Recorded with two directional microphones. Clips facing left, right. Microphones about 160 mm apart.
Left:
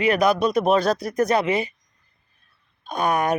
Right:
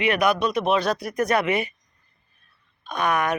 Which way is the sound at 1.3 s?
25° left (ahead or behind).